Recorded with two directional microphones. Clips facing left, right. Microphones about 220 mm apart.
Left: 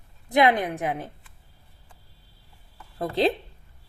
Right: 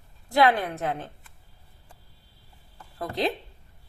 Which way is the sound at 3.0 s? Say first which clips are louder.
Left 5 dB; 30° left (ahead or behind).